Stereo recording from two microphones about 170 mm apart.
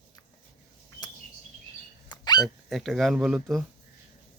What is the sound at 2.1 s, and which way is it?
Dog, 25° left (ahead or behind).